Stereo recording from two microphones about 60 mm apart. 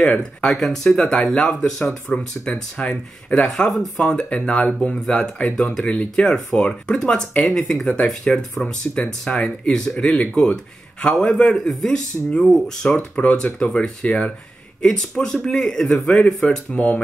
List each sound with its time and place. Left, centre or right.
0.0 s speech: centre
3.4 s speech: centre; by 13.7 s left
13.7 s speech: centre
16.4 s speech: left